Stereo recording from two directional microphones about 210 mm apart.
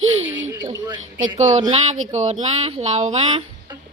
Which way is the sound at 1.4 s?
35° right (ahead or behind).